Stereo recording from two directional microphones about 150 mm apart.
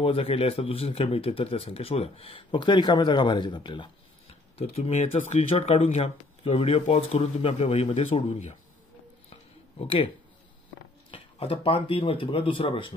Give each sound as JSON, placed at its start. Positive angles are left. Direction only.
{"t": 0.0, "sound": "speech", "side_deg": 40}
{"t": 4.6, "sound": "speech", "side_deg": 45}
{"t": 9.3, "sound": "a sound", "side_deg": 40}
{"t": 11.1, "sound": "speech", "side_deg": 40}